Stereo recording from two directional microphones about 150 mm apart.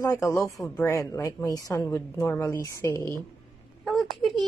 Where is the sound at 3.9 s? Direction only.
Centre (ahead or behind).